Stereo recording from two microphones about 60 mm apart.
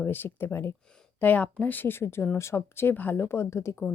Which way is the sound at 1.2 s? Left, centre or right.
Left.